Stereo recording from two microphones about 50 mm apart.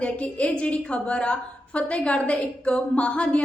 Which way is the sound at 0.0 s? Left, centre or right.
Left.